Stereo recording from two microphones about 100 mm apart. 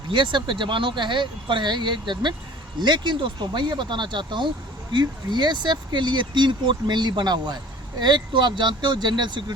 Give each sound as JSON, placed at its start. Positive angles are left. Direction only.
{"t": 0.1, "sound": "speech", "side_deg": -55}